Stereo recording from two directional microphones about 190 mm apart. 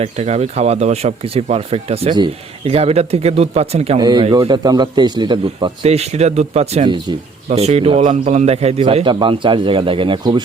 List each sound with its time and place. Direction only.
0.0 s a man's voice: 35° right (ahead or behind)